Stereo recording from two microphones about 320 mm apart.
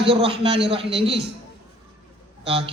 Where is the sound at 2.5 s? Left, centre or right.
Centre.